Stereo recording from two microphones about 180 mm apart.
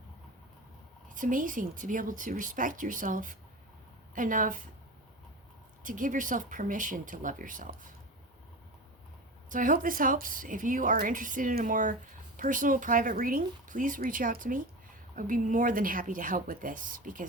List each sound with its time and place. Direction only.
1.1 s speech: 50° right (ahead or behind)
5.8 s speech: 45° right (ahead or behind)
9.5 s speech: 50° right (ahead or behind)